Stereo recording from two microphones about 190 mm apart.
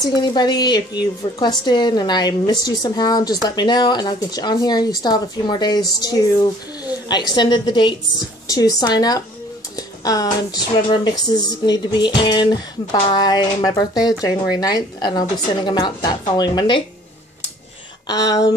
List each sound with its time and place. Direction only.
0.2 s speech: 20° left (ahead or behind)
9.8 s a sound: 20° left (ahead or behind)
10.5 s speech: 25° left (ahead or behind)
18.0 s speech: 20° left (ahead or behind)